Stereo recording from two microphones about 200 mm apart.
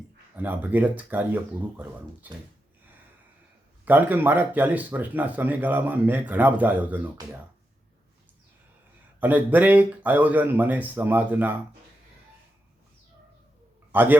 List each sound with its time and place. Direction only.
0.3 s speech: 10° right (ahead or behind)
3.8 s speech: 10° right (ahead or behind)
9.2 s speech: 10° right (ahead or behind)
13.9 s a man's voice: 10° right (ahead or behind)